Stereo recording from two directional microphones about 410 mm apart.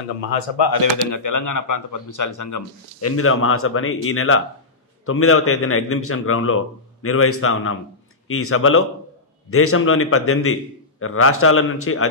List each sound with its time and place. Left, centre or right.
0.6 s a man's voice: left